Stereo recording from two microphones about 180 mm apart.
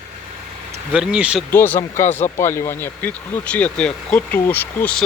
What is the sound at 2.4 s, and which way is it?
Speech, 15° left (ahead or behind).